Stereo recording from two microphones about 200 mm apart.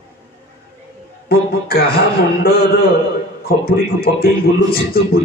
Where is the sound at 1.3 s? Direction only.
50° left (ahead or behind).